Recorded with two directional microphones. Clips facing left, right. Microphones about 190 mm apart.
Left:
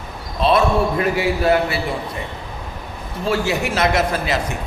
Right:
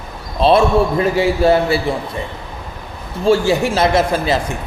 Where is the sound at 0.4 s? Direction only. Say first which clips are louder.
Right 4 dB; 30° right (ahead or behind).